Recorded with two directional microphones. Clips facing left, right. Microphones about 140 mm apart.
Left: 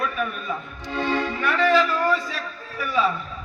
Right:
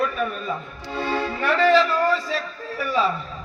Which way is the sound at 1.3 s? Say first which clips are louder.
Right 5 dB; 35° right (ahead or behind).